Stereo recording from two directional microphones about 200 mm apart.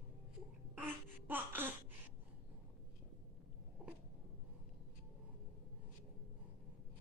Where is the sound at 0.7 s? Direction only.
10° right (ahead or behind).